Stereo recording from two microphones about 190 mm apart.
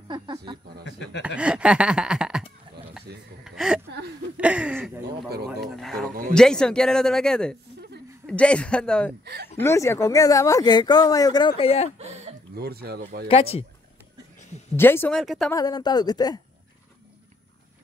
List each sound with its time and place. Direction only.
0.8 s speech: 70° left (ahead or behind)
1.2 s speech: 5° right (ahead or behind)
3.1 s speech: 60° right (ahead or behind)
3.4 s a sound: 5° right (ahead or behind)
6.3 s speech: 5° left (ahead or behind)
9.2 s speech: 60° right (ahead or behind)
9.6 s speech: 15° left (ahead or behind); by 11.9 s 30° left (ahead or behind)
12.0 s a sound: 35° right (ahead or behind)
12.5 s speech: 55° right (ahead or behind)
13.3 s speech: 30° left (ahead or behind)
14.8 s speech: 10° left (ahead or behind)
15.1 s speech: centre (ahead or behind)
15.5 s speech: 20° left (ahead or behind)